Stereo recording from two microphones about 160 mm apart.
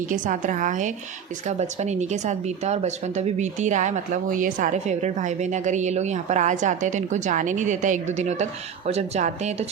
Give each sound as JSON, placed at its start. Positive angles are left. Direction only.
{"t": 0.1, "sound": "speech", "side_deg": -55}